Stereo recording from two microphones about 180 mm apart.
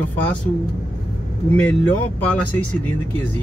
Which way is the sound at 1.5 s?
10° left (ahead or behind).